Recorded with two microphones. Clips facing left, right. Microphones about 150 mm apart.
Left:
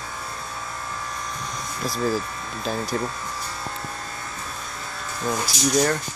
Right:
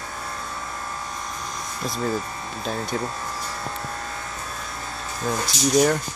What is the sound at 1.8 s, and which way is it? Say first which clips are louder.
Speech: left 2 dB; centre (ahead or behind).